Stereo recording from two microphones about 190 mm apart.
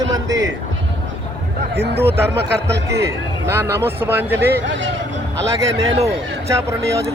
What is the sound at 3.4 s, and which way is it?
Speech, 10° right (ahead or behind).